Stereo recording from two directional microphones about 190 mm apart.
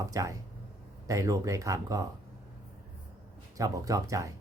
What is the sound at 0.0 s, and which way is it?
Speech, 15° right (ahead or behind).